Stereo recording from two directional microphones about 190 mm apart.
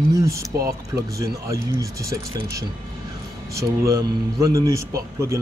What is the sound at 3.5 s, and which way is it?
A man's voice, 15° right (ahead or behind).